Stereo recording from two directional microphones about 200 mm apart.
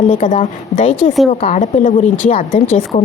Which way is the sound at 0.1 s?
40° left (ahead or behind).